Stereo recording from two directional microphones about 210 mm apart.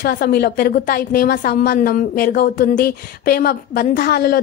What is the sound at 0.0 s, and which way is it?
A woman's voice, 45° left (ahead or behind).